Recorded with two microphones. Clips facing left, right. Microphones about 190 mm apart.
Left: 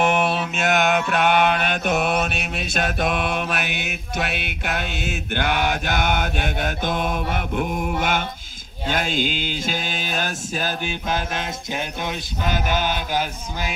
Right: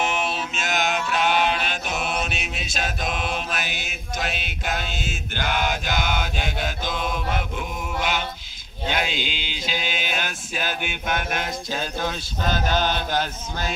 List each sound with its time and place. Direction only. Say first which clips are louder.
0.0 s mantra: left 6 dB; 55° left (ahead or behind); by 13.7 s 10° left (ahead or behind)